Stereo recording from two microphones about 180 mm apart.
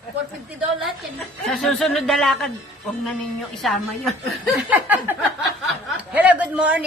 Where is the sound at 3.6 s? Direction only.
Centre (ahead or behind).